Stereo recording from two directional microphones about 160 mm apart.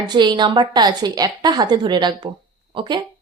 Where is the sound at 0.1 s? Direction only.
25° right (ahead or behind).